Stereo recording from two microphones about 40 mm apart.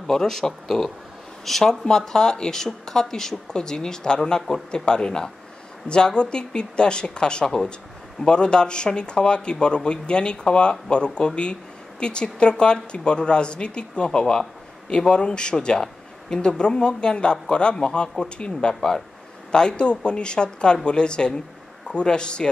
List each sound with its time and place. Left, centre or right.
0.0 s speech: centre